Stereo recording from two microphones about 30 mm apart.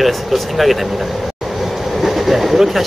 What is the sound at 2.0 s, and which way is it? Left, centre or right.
Vehicle, centre.